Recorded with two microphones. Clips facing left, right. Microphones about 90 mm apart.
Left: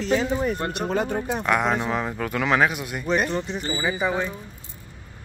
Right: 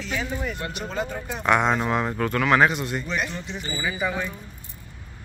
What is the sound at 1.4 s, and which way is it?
Speech, centre (ahead or behind).